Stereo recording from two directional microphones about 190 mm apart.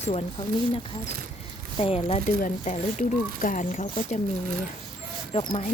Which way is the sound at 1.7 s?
30° left (ahead or behind).